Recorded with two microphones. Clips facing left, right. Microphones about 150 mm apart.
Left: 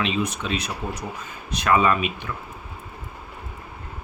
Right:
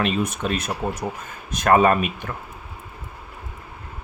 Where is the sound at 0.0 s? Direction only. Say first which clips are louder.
Right 2 dB; 50° right (ahead or behind).